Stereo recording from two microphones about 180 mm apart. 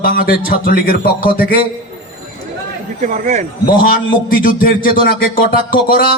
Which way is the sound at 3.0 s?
45° right (ahead or behind).